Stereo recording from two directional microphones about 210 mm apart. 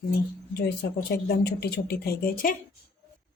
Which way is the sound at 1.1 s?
50° left (ahead or behind).